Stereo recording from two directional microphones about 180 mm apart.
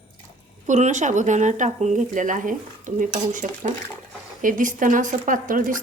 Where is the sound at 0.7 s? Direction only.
40° right (ahead or behind).